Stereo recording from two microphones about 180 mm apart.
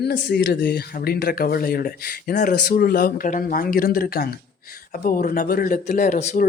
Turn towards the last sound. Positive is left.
turn(degrees=45)  # may be behind; listen again after turning